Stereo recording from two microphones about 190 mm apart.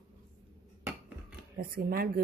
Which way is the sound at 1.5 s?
50° right (ahead or behind).